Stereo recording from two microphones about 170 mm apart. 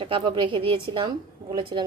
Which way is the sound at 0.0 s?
30° right (ahead or behind).